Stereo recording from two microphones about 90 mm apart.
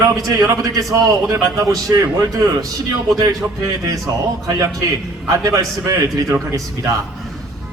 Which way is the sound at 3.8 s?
40° right (ahead or behind).